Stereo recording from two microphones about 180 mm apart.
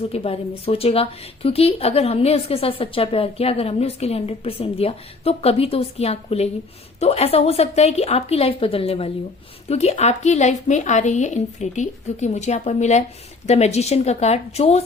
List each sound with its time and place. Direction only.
0.1 s speech: 35° left (ahead or behind)